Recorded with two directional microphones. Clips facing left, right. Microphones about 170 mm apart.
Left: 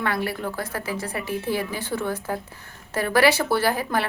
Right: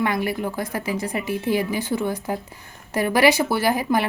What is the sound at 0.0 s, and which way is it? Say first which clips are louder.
A woman's voice: right 3 dB; 15° right (ahead or behind).